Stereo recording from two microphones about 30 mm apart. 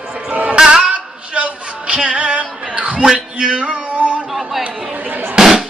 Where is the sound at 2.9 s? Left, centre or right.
Right.